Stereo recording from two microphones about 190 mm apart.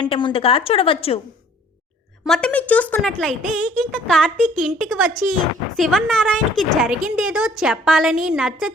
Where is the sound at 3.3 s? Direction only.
40° right (ahead or behind).